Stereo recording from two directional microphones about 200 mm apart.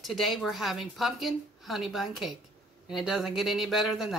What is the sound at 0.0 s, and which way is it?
A woman's voice, centre (ahead or behind).